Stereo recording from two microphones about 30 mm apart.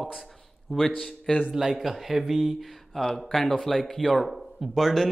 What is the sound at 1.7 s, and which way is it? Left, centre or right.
Speech, centre.